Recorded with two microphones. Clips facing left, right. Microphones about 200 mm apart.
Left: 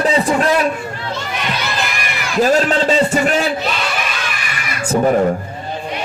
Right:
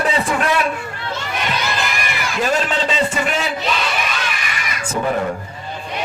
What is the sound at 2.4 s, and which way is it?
A man's voice, 40° left (ahead or behind).